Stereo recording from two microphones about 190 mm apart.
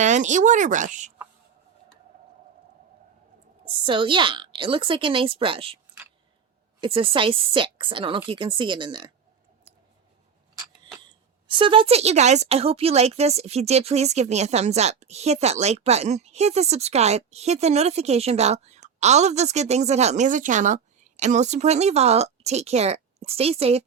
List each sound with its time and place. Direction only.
0.0 s speech: 40° right (ahead or behind)
3.8 s a woman's voice: 25° right (ahead or behind)
6.8 s a woman's voice: 30° right (ahead or behind)
11.4 s speech: 25° right (ahead or behind)